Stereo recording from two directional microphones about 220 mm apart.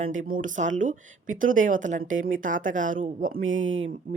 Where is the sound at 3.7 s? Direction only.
30° right (ahead or behind).